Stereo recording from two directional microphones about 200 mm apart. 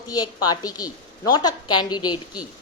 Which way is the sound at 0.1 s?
20° left (ahead or behind).